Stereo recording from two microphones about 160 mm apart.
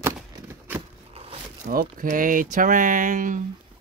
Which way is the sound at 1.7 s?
60° right (ahead or behind).